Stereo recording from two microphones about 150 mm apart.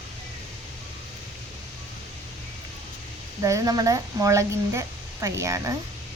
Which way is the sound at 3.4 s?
20° right (ahead or behind).